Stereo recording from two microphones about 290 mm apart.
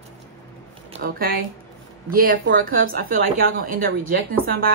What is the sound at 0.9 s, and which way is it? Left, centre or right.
Speech, right.